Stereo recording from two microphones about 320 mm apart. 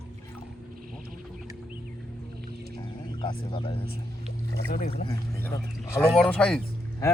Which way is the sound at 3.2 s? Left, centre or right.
Centre.